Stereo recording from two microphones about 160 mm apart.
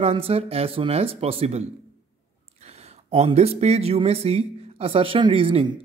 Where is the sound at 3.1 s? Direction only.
40° right (ahead or behind).